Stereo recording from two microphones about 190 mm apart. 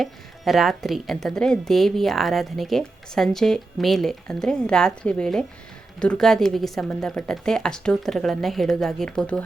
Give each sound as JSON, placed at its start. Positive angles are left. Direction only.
{"t": 0.0, "sound": "a woman's voice", "side_deg": 0}